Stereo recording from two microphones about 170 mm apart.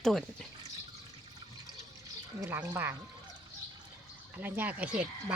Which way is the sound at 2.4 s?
10° right (ahead or behind).